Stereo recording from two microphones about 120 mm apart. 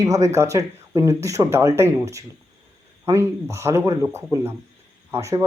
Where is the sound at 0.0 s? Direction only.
25° right (ahead or behind).